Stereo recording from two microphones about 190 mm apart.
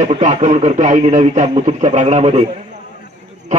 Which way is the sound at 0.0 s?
40° right (ahead or behind).